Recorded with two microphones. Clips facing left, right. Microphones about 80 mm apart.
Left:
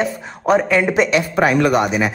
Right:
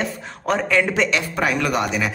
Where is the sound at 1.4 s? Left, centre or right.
Left.